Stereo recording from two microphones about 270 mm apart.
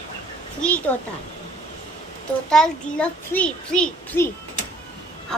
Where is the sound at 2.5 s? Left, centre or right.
Centre.